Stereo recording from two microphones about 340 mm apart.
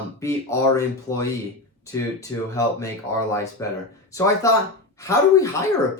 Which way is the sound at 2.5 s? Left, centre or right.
Centre.